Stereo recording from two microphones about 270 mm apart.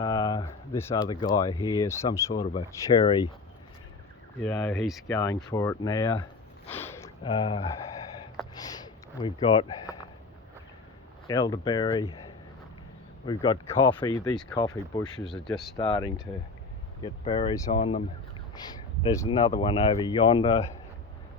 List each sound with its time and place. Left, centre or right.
0.0 s a sound: centre
1.2 s speech: centre
4.4 s speech: centre
5.0 s speech: centre
6.7 s a sound: centre
11.3 s speech: centre
13.2 s speech: centre